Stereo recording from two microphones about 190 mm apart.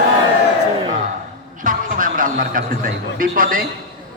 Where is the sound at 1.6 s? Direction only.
45° right (ahead or behind).